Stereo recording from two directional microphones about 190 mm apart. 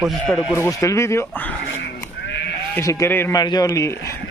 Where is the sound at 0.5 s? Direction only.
15° left (ahead or behind).